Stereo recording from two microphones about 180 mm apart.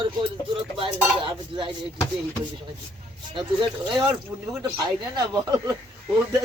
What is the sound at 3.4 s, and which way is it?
Speech, 25° right (ahead or behind).